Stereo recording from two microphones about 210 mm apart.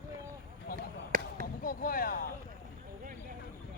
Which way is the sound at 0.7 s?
40° right (ahead or behind).